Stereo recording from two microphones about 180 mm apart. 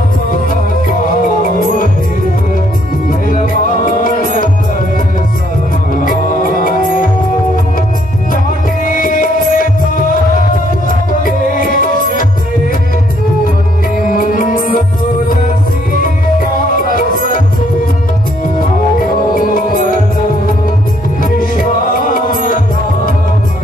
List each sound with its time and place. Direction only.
1.4 s music: 50° left (ahead or behind)
3.8 s music: 50° left (ahead or behind)
6.6 s music: 50° left (ahead or behind)
8.8 s music: 50° left (ahead or behind)
11.2 s music: 50° left (ahead or behind)
14.1 s music: 50° left (ahead or behind)
16.7 s music: 50° left (ahead or behind)
19.3 s music: 50° left (ahead or behind)
21.2 s music: 50° left (ahead or behind)